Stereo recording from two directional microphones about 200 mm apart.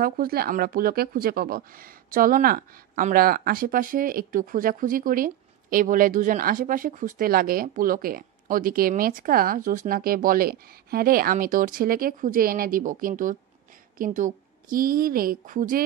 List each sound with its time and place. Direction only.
0.0 s a woman's voice: 50° right (ahead or behind)